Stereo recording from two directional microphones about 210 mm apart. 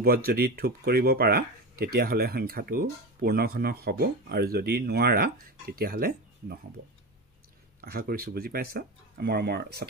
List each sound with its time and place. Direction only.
0.0 s speech: 45° right (ahead or behind)
7.8 s speech: 45° right (ahead or behind)